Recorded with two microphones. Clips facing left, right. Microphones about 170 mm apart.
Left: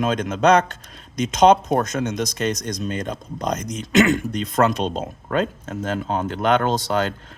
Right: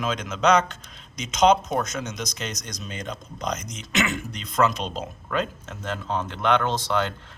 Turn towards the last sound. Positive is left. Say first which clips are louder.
# left 4 dB
turn(degrees=45)  # may be behind; listen again after turning